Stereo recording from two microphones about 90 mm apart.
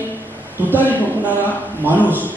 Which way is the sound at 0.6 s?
20° right (ahead or behind).